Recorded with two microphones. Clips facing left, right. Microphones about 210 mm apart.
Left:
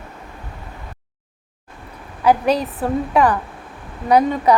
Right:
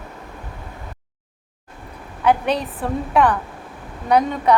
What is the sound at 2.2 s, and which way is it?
A woman's voice, 5° left (ahead or behind).